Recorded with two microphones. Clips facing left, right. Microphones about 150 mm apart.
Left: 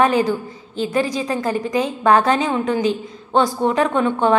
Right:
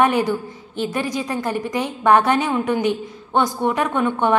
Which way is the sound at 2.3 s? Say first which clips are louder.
Left 1 dB; 10° right (ahead or behind).